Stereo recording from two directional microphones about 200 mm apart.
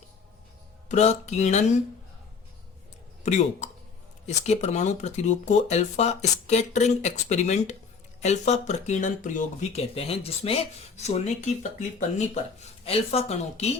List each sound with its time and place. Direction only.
0.9 s speech: 35° left (ahead or behind)
3.2 s speech: 35° left (ahead or behind)